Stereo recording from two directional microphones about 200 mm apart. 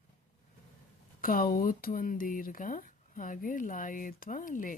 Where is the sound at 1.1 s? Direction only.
45° left (ahead or behind).